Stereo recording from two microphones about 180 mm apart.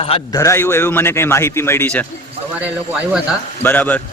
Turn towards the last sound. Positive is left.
turn(degrees=10)  # may be behind; listen again after turning